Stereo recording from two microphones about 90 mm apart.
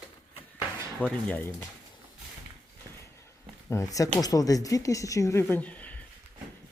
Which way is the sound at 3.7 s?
40° left (ahead or behind).